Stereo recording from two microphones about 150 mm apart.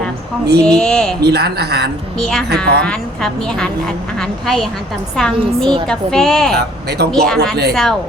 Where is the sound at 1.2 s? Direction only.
90° right.